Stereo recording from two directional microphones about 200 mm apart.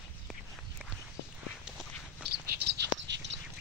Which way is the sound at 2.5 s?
55° right (ahead or behind).